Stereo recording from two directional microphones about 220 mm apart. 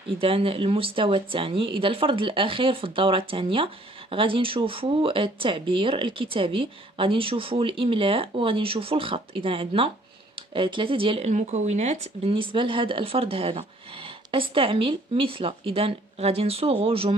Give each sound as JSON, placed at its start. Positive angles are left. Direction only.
{"t": 0.2, "sound": "speech", "side_deg": -25}